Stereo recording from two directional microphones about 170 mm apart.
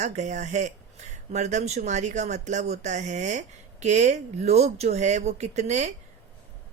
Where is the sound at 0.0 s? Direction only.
45° right (ahead or behind).